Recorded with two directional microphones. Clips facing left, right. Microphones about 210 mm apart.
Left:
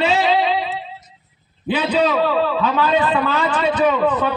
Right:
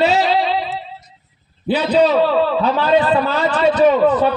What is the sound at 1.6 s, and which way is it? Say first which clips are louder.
A man's voice: right 4 dB; 40° right (ahead or behind).